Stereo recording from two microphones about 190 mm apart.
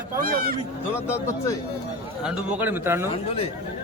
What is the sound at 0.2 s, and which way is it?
Speech, 50° right (ahead or behind).